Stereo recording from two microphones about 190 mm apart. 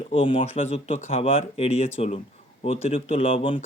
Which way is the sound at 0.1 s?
30° left (ahead or behind).